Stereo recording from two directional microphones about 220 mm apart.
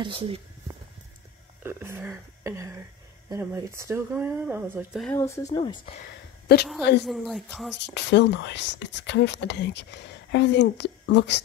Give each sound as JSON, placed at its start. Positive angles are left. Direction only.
{"t": 0.0, "sound": "speech", "side_deg": -25}
{"t": 1.6, "sound": "speech", "side_deg": -10}
{"t": 5.0, "sound": "speech", "side_deg": 10}
{"t": 6.8, "sound": "speech", "side_deg": 50}
{"t": 7.1, "sound": "speech", "side_deg": 0}
{"t": 7.9, "sound": "speech", "side_deg": 50}